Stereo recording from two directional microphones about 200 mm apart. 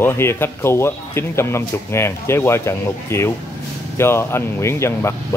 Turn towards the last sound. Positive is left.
turn(degrees=15)  # may be behind; listen again after turning